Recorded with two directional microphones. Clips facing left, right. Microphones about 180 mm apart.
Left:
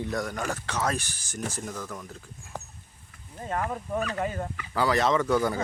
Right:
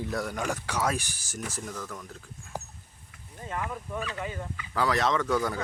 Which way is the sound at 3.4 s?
40° left (ahead or behind).